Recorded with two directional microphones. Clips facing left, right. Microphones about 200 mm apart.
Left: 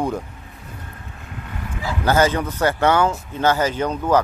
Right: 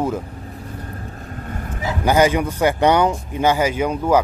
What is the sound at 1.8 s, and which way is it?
Speech, 15° right (ahead or behind).